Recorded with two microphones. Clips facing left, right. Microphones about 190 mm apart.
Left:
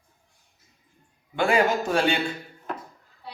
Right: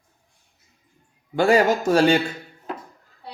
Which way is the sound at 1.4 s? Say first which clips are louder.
Right 4 dB; 40° right (ahead or behind).